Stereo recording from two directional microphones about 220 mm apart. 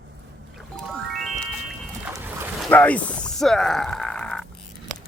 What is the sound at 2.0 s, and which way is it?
Dog, 10° right (ahead or behind).